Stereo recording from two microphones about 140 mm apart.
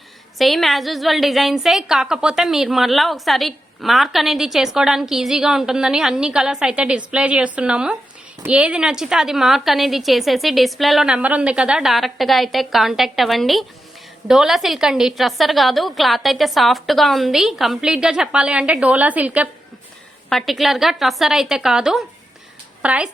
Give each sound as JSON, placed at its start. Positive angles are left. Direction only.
{"t": 0.3, "sound": "a woman's voice", "side_deg": 0}
{"t": 20.3, "sound": "a woman's voice", "side_deg": 0}